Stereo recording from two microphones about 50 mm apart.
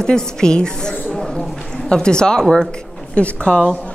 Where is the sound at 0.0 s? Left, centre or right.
Centre.